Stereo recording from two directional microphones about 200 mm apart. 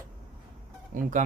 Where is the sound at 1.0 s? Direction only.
40° right (ahead or behind).